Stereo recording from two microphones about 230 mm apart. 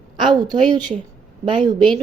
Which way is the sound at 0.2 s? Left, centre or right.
Centre.